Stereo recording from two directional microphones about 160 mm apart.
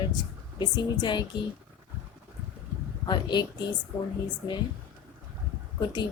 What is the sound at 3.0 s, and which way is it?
Speech, 25° left (ahead or behind).